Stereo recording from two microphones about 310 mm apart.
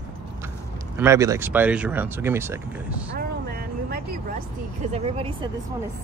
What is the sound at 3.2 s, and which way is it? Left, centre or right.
Vehicle, right.